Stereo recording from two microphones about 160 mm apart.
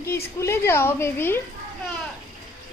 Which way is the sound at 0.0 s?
20° left (ahead or behind).